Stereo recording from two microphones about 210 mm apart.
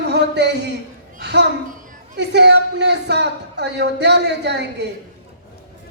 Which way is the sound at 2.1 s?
55° right (ahead or behind).